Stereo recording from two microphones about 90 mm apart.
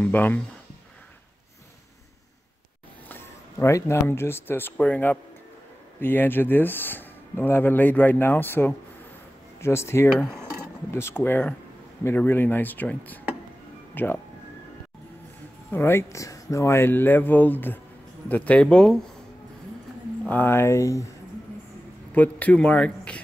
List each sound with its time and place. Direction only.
0.0 s speech: 20° left (ahead or behind)
3.1 s speech: 25° left (ahead or behind)
15.7 s speech: 25° left (ahead or behind); by 18.9 s 10° left (ahead or behind)
20.2 s speech: 25° left (ahead or behind)
22.1 s speech: 20° left (ahead or behind)